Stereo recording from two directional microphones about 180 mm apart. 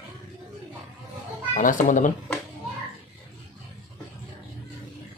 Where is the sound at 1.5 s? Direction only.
45° left (ahead or behind).